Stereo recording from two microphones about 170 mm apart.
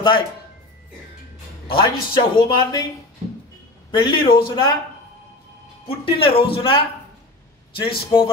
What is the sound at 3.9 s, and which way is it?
Speech, 25° left (ahead or behind).